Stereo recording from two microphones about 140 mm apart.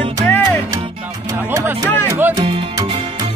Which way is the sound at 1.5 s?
20° right (ahead or behind).